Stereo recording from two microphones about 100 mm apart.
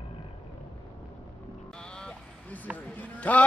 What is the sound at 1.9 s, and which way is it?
Vehicle, 10° left (ahead or behind).